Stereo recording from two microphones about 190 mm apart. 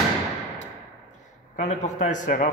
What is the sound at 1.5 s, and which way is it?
Speech, 40° left (ahead or behind).